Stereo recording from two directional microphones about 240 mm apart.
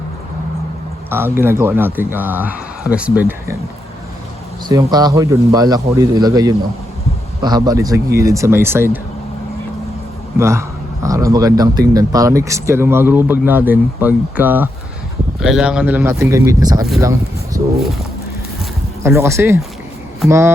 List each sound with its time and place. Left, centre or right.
1.1 s speech: centre
4.7 s speech: centre
10.3 s speech: centre
17.0 s a sound: centre
19.0 s speech: centre